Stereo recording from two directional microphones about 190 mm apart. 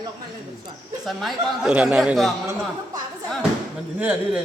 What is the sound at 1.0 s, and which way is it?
A man's voice, centre (ahead or behind).